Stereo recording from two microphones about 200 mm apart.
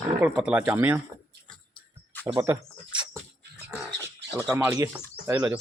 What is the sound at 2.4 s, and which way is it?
Bird, 10° right (ahead or behind).